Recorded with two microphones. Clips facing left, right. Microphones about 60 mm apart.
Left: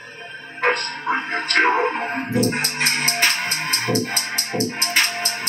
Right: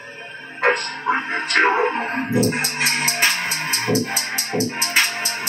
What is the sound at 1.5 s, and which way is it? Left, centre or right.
Music, centre.